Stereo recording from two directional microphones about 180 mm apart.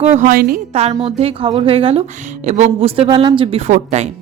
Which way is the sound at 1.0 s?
35° right (ahead or behind).